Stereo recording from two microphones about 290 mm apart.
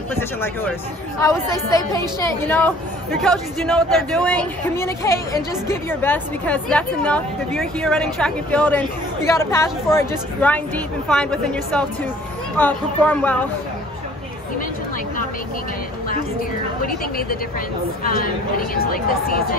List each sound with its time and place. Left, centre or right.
0.1 s speech: centre
16.8 s speech: left